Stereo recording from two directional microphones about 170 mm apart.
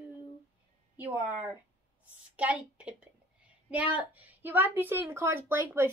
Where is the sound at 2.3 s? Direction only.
10° right (ahead or behind).